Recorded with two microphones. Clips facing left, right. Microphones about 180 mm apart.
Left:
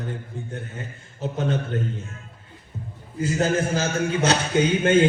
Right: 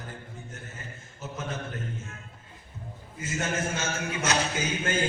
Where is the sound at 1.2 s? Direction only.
70° left (ahead or behind).